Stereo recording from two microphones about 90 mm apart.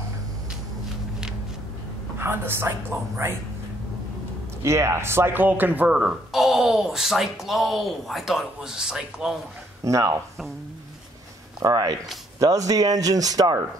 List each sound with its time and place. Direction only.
2.1 s speech: 25° right (ahead or behind)
4.6 s speech: 30° right (ahead or behind)
5.9 s speech: 5° right (ahead or behind)
9.8 s speech: 35° right (ahead or behind)
11.6 s speech: 45° right (ahead or behind)